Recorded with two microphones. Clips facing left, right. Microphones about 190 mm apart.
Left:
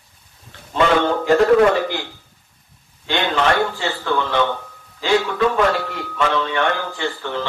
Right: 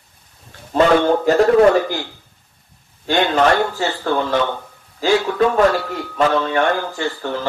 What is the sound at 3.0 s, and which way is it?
A man's voice, 45° right (ahead or behind).